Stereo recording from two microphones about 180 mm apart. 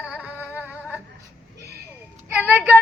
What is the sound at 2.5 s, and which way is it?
Child singing, 5° right (ahead or behind).